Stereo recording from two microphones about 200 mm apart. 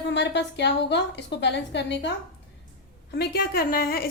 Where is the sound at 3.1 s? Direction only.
50° left (ahead or behind).